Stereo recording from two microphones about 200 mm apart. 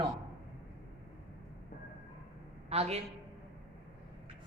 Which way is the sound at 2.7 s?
30° right (ahead or behind).